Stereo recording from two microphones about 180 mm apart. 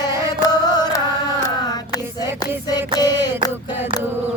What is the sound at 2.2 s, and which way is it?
Music, 20° left (ahead or behind).